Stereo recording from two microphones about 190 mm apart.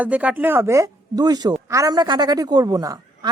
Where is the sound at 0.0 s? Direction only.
10° right (ahead or behind).